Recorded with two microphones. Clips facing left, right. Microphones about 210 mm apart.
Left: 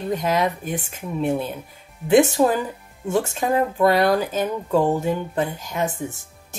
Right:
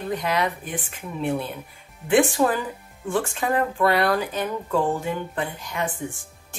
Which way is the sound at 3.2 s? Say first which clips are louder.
Left 3 dB; 25° left (ahead or behind).